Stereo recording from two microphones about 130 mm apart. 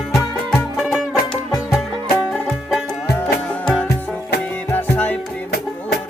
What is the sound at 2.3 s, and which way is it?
Music, centre (ahead or behind).